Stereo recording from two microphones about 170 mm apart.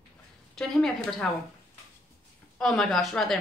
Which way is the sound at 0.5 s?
5° left (ahead or behind).